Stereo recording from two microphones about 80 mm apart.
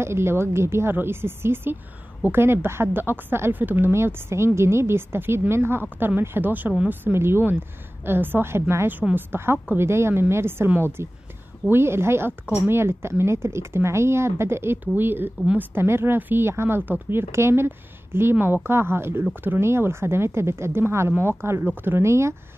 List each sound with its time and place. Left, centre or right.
0.0 s a woman's voice: right